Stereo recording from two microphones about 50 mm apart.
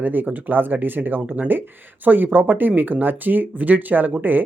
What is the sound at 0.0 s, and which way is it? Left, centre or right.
Speech, right.